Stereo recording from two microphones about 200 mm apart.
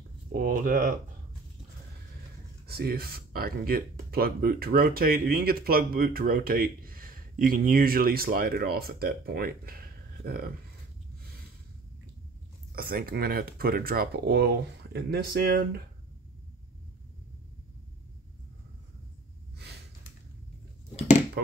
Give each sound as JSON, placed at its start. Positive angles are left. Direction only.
{"t": 0.3, "sound": "speech", "side_deg": -45}
{"t": 2.6, "sound": "speech", "side_deg": -50}
{"t": 12.7, "sound": "speech", "side_deg": -45}
{"t": 19.5, "sound": "gasp", "side_deg": -55}